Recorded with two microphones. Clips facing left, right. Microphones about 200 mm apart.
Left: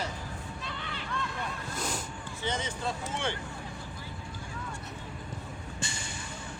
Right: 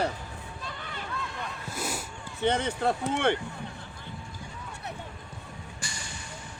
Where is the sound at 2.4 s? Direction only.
60° right (ahead or behind).